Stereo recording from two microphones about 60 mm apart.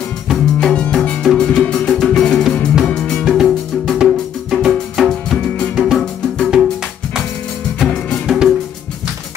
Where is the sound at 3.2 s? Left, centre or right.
Centre.